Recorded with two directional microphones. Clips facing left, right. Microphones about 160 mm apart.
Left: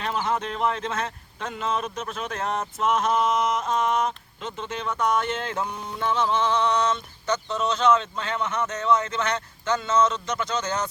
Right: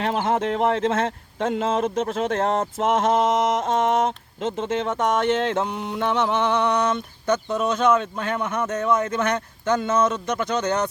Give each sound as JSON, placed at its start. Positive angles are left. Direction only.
{"t": 0.0, "sound": "speech", "side_deg": -70}
{"t": 5.7, "sound": "fowl", "side_deg": -70}
{"t": 7.5, "sound": "speech", "side_deg": -55}